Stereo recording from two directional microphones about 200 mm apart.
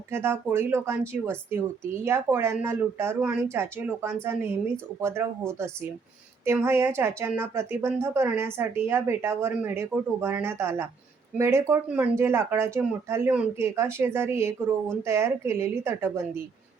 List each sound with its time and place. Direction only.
0.1 s speech: 10° right (ahead or behind)